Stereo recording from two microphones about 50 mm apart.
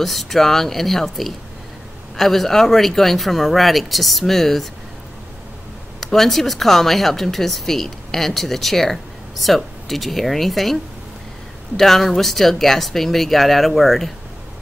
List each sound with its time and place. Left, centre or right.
0.0 s speech: centre
6.1 s speech: centre